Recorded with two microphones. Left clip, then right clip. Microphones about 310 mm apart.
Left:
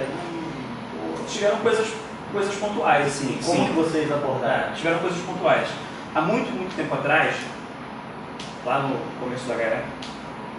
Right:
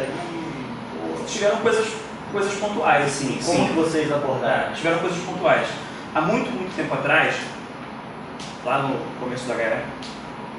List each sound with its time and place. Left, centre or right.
1.3 s a man's voice: centre
8.7 s speech: centre